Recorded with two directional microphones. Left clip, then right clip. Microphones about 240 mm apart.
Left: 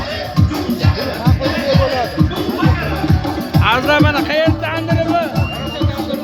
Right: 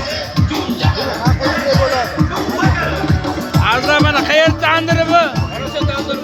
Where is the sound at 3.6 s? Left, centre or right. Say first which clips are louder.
Even; centre.